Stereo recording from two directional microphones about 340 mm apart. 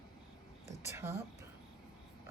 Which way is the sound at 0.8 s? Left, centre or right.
Centre.